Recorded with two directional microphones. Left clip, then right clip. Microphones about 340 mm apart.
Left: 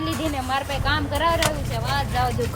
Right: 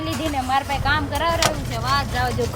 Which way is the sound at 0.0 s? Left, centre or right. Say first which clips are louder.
Right 2 dB; centre.